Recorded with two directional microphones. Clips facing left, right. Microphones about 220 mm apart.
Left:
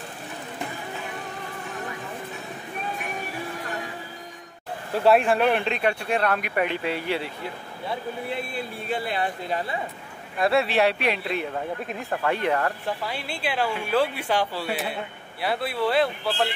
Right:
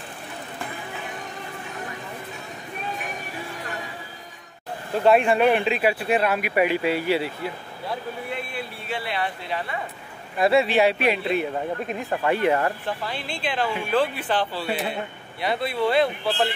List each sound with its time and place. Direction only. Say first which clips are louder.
4.9 s speech: right 1 dB; centre (ahead or behind)
8.8 s speech: left 2 dB; 45° left (ahead or behind)
10.4 s speech: right 2 dB; centre (ahead or behind)
12.8 s speech: even; 10° left (ahead or behind)